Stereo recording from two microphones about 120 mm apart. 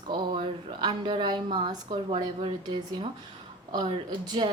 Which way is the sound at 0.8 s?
40° right (ahead or behind).